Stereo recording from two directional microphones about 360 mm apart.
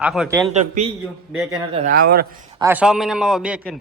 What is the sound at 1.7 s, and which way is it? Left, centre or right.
Speech, right.